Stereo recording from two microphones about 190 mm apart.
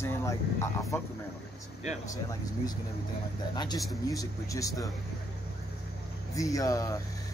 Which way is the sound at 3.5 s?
20° left (ahead or behind).